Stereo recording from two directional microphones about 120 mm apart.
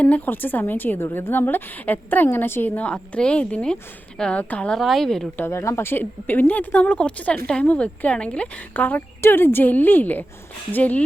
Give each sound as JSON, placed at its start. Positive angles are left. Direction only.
{"t": 0.0, "sound": "a woman's voice", "side_deg": 15}
{"t": 5.4, "sound": "speech", "side_deg": 25}